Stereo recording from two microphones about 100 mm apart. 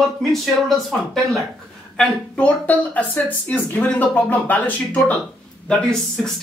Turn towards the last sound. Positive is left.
turn(degrees=5)  # may be behind; listen again after turning